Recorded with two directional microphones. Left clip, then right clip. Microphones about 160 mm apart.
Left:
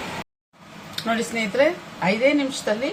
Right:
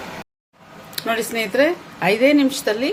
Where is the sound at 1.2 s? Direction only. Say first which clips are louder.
Right 3 dB; 60° right (ahead or behind).